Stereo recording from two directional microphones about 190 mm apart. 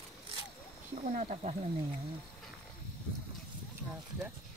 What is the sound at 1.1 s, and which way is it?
Speech, 40° right (ahead or behind).